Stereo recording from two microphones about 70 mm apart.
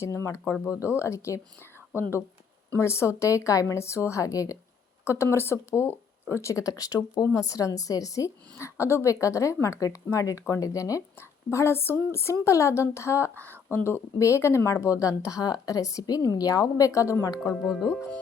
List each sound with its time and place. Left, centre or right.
0.0 s speech: left
5.0 s speech: left
8.5 s speech: left
11.5 s speech: left
13.4 s speech: right
13.7 s a woman's voice: left
17.7 s speech: centre